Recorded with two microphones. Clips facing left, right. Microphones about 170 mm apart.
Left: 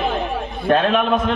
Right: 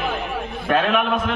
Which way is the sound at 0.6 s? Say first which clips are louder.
Left 3 dB; 35° left (ahead or behind).